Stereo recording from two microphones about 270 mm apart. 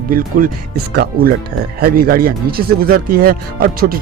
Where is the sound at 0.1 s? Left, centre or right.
Right.